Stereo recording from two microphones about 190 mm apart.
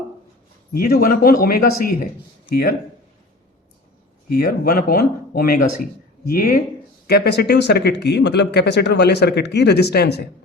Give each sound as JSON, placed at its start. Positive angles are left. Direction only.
{"t": 0.7, "sound": "speech", "side_deg": 55}
{"t": 4.3, "sound": "speech", "side_deg": 55}
{"t": 7.1, "sound": "speech", "side_deg": 60}